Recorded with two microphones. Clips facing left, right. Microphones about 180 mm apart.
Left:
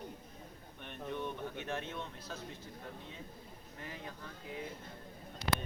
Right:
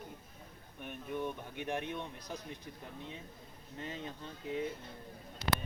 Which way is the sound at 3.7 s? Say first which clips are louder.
Right 4 dB; 20° right (ahead or behind).